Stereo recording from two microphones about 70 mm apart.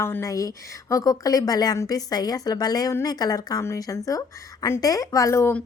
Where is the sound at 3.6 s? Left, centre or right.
Left.